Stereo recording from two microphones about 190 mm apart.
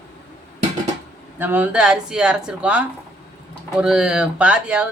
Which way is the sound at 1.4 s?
10° right (ahead or behind).